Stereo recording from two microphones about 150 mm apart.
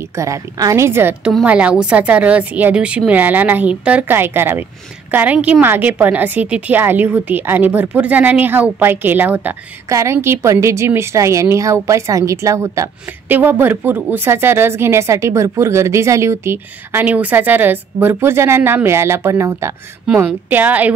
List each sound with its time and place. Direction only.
0.1 s a woman's voice: 20° right (ahead or behind)